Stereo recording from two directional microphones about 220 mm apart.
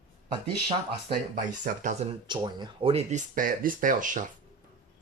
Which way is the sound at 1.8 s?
30° right (ahead or behind).